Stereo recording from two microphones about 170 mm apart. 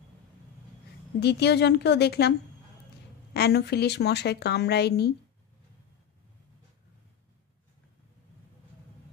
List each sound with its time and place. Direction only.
1.2 s speech: 80° left
3.3 s speech: 75° left (ahead or behind)